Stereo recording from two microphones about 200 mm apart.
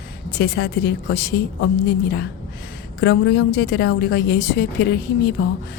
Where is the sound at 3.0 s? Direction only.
55° left (ahead or behind).